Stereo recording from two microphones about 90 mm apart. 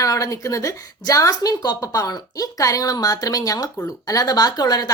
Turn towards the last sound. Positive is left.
turn(degrees=45)  # may be behind; listen again after turning